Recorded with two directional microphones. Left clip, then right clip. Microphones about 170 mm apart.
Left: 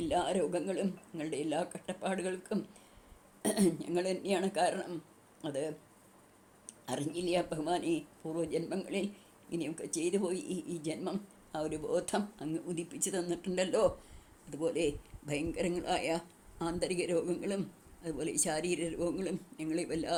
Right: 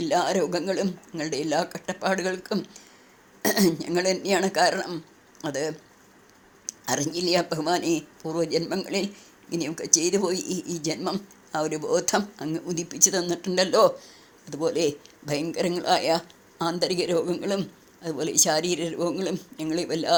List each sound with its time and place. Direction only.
0.0 s a man's voice: 20° right (ahead or behind)
6.8 s a woman's voice: 20° right (ahead or behind)